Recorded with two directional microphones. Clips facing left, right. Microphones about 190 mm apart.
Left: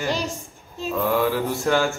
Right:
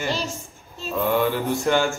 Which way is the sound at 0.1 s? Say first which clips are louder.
Left 1 dB; 15° left (ahead or behind).